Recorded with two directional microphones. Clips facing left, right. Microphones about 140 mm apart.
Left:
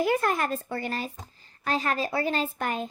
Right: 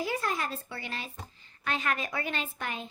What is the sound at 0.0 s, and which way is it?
A woman's voice, 55° left (ahead or behind).